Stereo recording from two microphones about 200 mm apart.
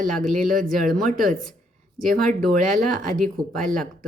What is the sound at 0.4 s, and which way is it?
Speech, 45° right (ahead or behind).